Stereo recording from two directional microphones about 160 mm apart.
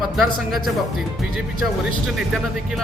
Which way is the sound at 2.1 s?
5° right (ahead or behind).